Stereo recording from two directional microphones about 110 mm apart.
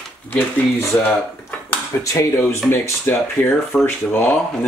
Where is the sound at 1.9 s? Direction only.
25° left (ahead or behind).